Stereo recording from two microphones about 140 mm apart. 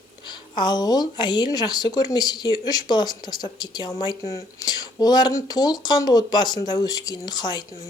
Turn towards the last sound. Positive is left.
turn(degrees=30)  # may be behind; listen again after turning